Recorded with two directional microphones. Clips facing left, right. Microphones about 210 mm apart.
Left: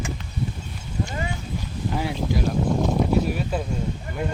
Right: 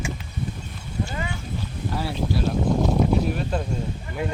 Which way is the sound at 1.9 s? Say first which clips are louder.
Even; 15° left (ahead or behind).